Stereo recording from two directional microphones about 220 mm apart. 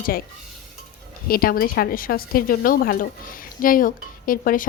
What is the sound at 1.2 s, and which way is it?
A woman's voice, 40° left (ahead or behind).